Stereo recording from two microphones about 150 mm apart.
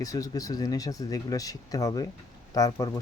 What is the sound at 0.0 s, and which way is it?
Speech, 25° left (ahead or behind).